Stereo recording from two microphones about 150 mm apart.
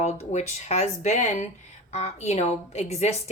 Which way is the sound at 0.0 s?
50° left (ahead or behind).